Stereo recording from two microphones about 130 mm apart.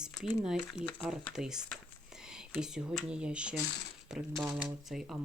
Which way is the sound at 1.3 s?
5° right (ahead or behind).